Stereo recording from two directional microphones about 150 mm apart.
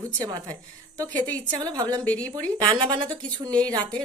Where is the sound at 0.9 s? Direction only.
25° right (ahead or behind).